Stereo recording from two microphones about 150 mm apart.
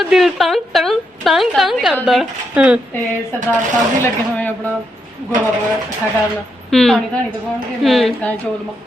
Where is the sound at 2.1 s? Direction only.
5° right (ahead or behind).